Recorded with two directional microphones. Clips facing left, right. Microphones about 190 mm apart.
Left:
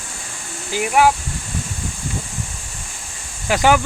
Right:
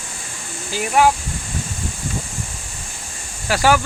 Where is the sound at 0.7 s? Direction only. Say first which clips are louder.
Left 1 dB; 15° left (ahead or behind).